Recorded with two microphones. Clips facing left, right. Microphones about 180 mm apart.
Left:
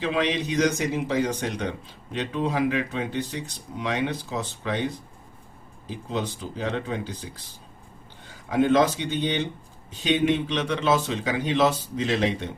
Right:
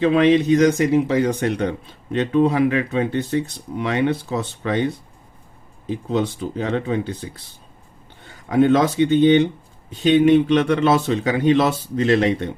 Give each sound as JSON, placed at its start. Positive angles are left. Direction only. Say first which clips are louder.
{"t": 0.0, "sound": "speech", "louder": "right 10 dB", "side_deg": -60}
{"t": 5.9, "sound": "speech", "louder": "right 8 dB", "side_deg": -60}
{"t": 8.4, "sound": "speech", "louder": "right 4 dB", "side_deg": -55}